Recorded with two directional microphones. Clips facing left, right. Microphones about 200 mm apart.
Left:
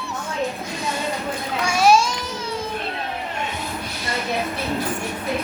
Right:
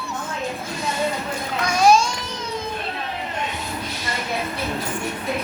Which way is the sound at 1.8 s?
5° left (ahead or behind).